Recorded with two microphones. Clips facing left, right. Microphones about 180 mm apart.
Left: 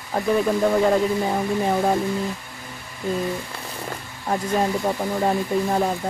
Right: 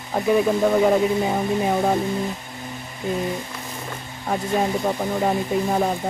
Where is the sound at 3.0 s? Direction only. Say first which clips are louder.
Even; 20° right (ahead or behind).